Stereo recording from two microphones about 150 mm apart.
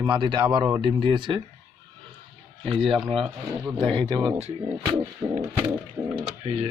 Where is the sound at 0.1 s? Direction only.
30° right (ahead or behind).